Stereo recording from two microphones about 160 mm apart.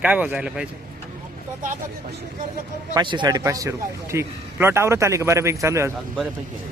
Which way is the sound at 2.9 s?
30° right (ahead or behind).